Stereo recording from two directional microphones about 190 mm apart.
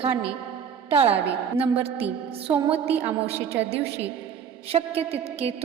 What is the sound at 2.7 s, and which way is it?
A woman's voice, 30° right (ahead or behind).